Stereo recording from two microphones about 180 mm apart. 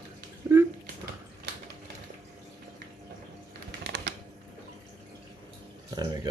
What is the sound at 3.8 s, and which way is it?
Typing, 65° right (ahead or behind).